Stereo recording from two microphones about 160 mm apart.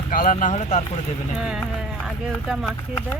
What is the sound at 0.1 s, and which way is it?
Speech, 55° left (ahead or behind).